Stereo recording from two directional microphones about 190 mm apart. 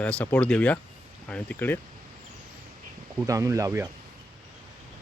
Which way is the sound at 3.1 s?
15° right (ahead or behind).